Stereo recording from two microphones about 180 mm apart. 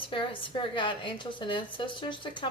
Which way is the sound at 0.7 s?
25° left (ahead or behind).